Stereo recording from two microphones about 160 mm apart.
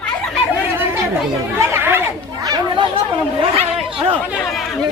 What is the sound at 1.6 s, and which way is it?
Speech, 15° right (ahead or behind).